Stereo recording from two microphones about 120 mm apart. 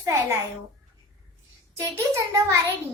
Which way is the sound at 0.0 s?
25° right (ahead or behind).